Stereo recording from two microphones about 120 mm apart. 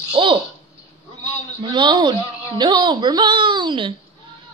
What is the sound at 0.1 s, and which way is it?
Bird, 45° right (ahead or behind).